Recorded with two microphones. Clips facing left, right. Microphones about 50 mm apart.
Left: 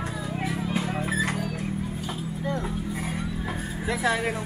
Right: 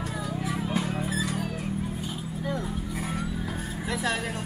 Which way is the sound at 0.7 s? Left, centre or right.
Centre.